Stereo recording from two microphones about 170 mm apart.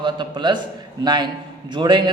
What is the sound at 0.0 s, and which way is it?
A man's voice, 25° right (ahead or behind).